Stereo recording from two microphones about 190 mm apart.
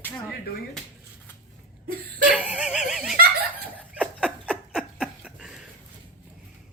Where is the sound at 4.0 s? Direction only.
5° right (ahead or behind).